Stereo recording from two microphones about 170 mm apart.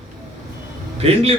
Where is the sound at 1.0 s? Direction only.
35° right (ahead or behind).